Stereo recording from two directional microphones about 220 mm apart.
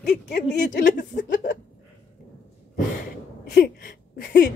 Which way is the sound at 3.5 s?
45° left (ahead or behind).